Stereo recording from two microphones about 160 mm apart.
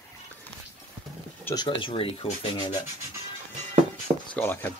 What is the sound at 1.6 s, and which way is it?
Speech, 30° left (ahead or behind).